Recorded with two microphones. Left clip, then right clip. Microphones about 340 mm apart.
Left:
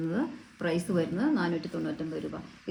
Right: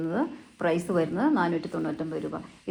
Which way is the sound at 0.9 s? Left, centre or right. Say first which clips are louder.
Right 4 dB; centre.